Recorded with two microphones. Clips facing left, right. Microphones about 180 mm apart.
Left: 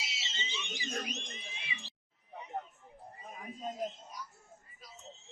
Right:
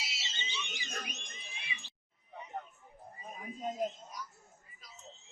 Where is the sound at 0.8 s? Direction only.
20° left (ahead or behind).